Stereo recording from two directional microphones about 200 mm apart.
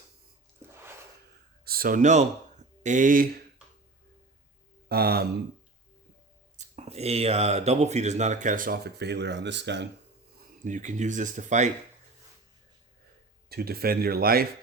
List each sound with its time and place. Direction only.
1.6 s speech: 45° right (ahead or behind)
4.9 s speech: 50° right (ahead or behind)
6.6 s speech: 30° right (ahead or behind); by 9.8 s 60° right (ahead or behind)
10.6 s speech: 40° right (ahead or behind)
13.5 s speech: 50° right (ahead or behind)